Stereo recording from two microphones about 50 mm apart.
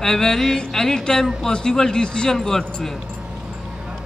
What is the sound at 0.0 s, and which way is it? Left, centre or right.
Speech, centre.